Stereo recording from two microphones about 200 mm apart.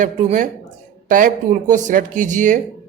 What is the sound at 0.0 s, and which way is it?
A man's voice, 40° right (ahead or behind).